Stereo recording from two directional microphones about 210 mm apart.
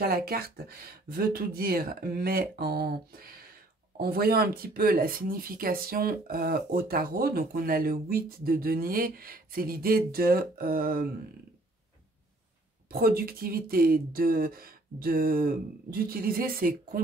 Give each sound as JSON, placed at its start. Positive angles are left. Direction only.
{"t": 0.0, "sound": "speech", "side_deg": -45}
{"t": 12.9, "sound": "speech", "side_deg": -45}